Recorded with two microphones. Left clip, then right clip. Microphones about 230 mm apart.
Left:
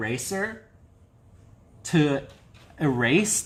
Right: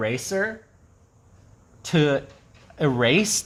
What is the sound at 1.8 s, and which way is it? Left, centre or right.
Speech, right.